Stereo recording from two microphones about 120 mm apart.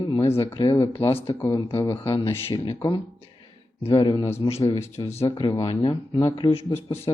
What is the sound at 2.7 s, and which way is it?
Speech, 35° left (ahead or behind).